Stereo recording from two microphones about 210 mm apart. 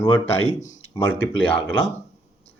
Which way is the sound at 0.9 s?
10° left (ahead or behind).